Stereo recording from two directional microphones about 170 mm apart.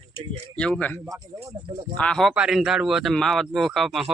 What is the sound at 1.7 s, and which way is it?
Speech, 30° right (ahead or behind).